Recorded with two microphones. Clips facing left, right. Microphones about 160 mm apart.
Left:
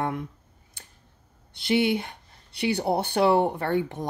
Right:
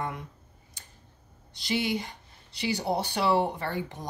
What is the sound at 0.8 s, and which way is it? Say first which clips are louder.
Tick-tock: left 4 dB; 60° left (ahead or behind).